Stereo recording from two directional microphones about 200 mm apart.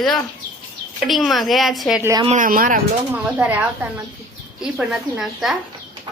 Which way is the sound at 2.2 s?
40° right (ahead or behind).